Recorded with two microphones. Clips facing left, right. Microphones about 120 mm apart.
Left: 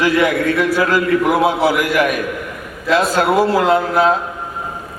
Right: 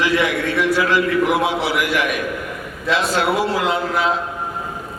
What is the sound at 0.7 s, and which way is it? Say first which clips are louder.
Speech: left 1 dB; 45° left (ahead or behind).